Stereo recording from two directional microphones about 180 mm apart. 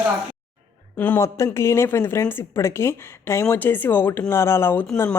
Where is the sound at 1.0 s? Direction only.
15° left (ahead or behind).